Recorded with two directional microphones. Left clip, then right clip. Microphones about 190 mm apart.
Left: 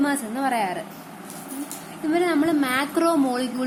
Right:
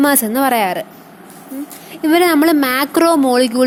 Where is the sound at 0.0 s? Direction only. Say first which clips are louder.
Right 10 dB; 50° right (ahead or behind).